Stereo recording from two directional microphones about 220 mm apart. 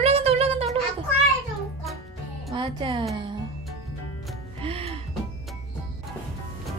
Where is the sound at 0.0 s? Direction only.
25° right (ahead or behind).